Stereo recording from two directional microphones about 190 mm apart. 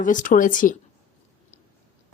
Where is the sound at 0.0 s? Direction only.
45° left (ahead or behind).